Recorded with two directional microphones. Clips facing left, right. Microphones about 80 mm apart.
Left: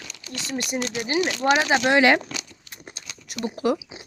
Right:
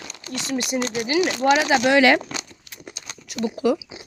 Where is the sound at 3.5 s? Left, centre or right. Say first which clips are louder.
Right 2 dB; left.